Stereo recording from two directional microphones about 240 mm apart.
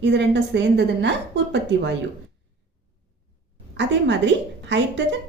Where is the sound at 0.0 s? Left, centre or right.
Right.